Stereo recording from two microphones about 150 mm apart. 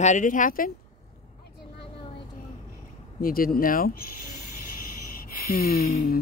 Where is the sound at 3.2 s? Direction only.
75° left (ahead or behind).